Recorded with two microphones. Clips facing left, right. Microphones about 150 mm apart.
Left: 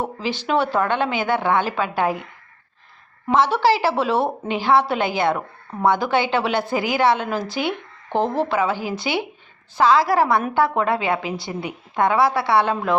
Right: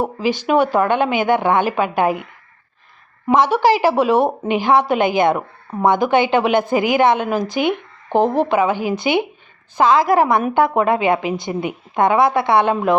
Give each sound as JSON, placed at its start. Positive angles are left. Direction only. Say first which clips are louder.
{"t": 0.0, "sound": "a woman's voice", "louder": "right 6 dB", "side_deg": -10}
{"t": 3.2, "sound": "a woman's voice", "louder": "right 3 dB", "side_deg": -15}